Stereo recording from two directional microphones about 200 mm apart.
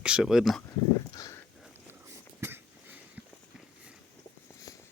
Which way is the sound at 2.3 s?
10° right (ahead or behind).